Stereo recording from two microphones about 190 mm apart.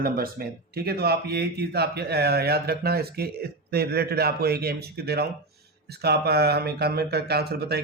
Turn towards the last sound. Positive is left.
turn(degrees=-60)  # may be behind; listen again after turning